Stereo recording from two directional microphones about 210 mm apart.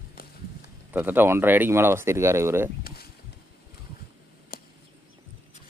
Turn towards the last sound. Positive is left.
turn(degrees=45)  # may be behind; listen again after turning